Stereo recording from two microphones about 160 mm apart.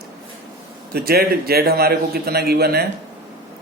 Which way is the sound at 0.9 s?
75° right (ahead or behind).